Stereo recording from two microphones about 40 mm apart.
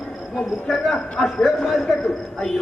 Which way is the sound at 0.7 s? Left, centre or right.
Centre.